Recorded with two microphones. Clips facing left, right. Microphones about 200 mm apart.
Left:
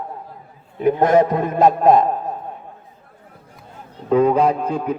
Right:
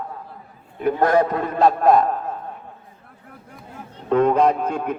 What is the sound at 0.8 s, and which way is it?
A man's voice, 20° left (ahead or behind).